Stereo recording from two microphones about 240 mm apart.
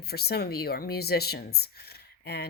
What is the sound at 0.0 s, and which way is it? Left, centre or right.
Speech, left.